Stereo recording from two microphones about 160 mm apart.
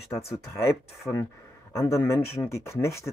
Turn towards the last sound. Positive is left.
turn(degrees=20)  # may be behind; listen again after turning